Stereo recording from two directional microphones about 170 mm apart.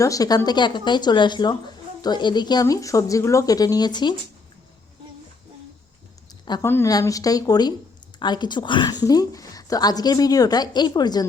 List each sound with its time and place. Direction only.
0.0 s a woman's voice: 20° left (ahead or behind)
6.4 s a sound: 25° left (ahead or behind)
6.7 s a woman's voice: 15° left (ahead or behind)